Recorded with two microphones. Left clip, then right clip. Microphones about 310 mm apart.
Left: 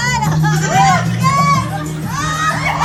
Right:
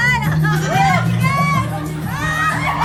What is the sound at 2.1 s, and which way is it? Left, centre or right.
Children shouting, centre.